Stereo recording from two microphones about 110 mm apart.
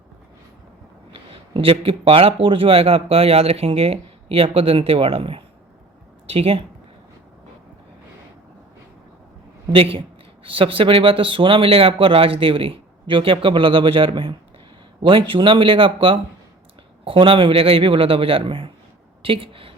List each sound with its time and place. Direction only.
1.1 s speech: 55° right (ahead or behind)
9.7 s speech: 60° right (ahead or behind)